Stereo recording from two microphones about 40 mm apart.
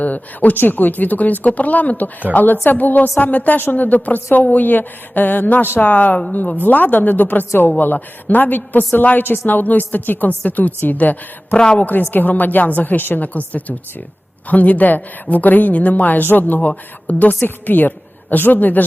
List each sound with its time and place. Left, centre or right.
0.0 s a woman's voice: left
11.5 s speech: left
12.1 s a woman's voice: left